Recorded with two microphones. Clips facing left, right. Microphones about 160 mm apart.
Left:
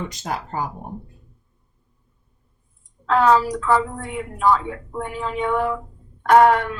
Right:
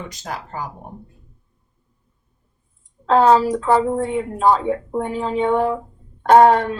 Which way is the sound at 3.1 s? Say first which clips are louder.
Right 3 dB; 30° right (ahead or behind).